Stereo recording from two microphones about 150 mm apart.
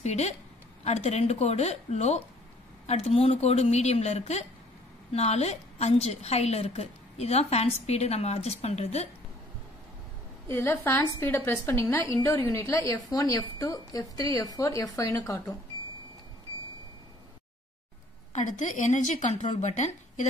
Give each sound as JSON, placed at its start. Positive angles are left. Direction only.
{"t": 0.0, "sound": "a woman's voice", "side_deg": 45}
{"t": 10.5, "sound": "a woman's voice", "side_deg": 15}
{"t": 18.3, "sound": "a woman's voice", "side_deg": 55}